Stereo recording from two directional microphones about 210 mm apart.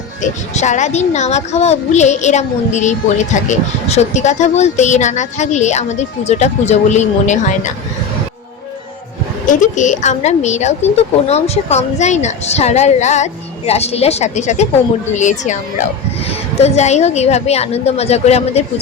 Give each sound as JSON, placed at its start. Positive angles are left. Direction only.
{"t": 0.2, "sound": "speech", "side_deg": 35}
{"t": 9.5, "sound": "speech", "side_deg": 35}